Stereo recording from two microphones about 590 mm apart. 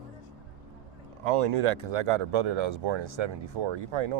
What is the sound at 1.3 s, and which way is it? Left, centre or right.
Speech, right.